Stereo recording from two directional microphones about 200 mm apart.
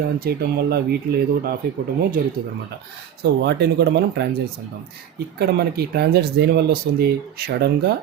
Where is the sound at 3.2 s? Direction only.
60° right (ahead or behind).